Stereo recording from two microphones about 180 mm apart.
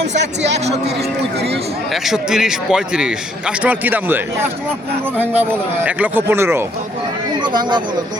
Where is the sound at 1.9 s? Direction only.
Centre (ahead or behind).